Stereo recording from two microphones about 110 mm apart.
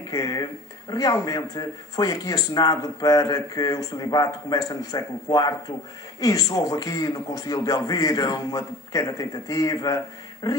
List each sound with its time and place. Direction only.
0.1 s speech: 35° left (ahead or behind)